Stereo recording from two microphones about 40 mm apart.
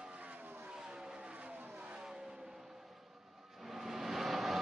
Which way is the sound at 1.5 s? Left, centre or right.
Right.